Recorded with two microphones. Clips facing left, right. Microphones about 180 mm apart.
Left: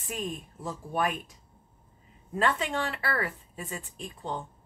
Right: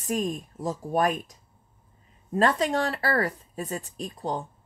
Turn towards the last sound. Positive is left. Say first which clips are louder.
# right 5 dB
turn(degrees=-40)  # may be behind; listen again after turning